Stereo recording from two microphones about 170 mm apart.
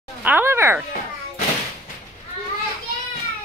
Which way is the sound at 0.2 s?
10° right (ahead or behind).